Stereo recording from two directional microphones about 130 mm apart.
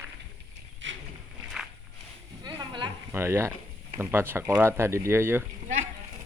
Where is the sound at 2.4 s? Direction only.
35° right (ahead or behind).